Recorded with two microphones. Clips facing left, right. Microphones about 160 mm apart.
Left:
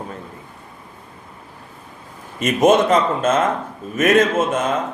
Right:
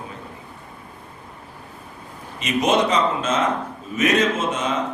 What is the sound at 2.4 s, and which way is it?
A man's voice, 50° left (ahead or behind).